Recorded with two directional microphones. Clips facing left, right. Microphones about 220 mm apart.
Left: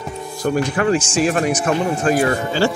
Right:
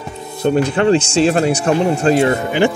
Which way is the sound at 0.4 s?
25° right (ahead or behind).